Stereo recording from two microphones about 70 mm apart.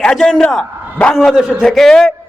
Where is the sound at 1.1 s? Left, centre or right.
Centre.